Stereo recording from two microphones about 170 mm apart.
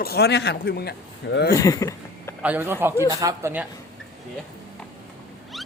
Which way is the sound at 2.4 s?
10° right (ahead or behind).